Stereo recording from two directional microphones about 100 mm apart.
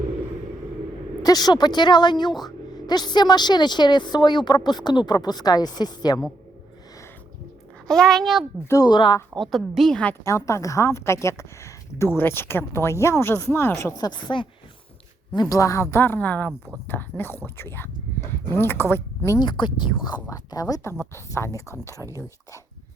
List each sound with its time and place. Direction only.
1.2 s speech: 40° left (ahead or behind)
7.9 s a woman's voice: 5° left (ahead or behind)
8.6 s speech: 30° left (ahead or behind)
8.9 s speech: 50° left (ahead or behind)
9.3 s a woman's voice: centre (ahead or behind)
10.2 s a woman's voice: 30° left (ahead or behind)
14.0 s speech: 50° left (ahead or behind)
15.4 s a woman's voice: 35° left (ahead or behind); by 16.5 s 15° left (ahead or behind)
16.5 s speech: 5° right (ahead or behind)
16.8 s a woman's voice: 20° left (ahead or behind)
19.4 s speech: 50° left (ahead or behind)
20.5 s a woman's voice: 35° left (ahead or behind)